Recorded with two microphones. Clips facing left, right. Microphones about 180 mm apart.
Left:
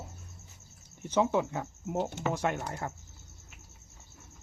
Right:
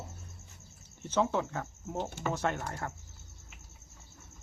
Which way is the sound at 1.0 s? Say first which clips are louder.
Left 3 dB; 15° left (ahead or behind).